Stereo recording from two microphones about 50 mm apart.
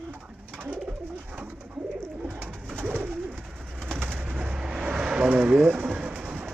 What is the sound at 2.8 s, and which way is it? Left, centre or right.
Bird, right.